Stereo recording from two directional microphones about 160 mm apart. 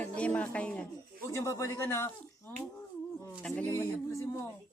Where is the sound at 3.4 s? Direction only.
10° left (ahead or behind).